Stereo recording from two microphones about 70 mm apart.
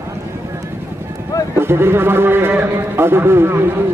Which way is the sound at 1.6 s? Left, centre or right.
Right.